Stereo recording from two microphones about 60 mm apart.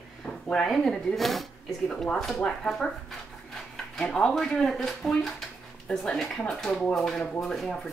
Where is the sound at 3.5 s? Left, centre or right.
Centre.